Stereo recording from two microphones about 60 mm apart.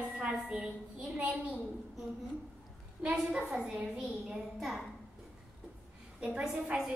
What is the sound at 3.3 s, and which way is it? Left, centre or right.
Speech, centre.